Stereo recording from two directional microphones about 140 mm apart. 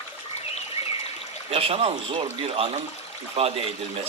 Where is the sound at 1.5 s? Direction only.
45° right (ahead or behind).